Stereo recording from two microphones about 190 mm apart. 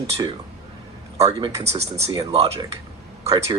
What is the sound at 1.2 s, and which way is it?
Speech, 20° right (ahead or behind).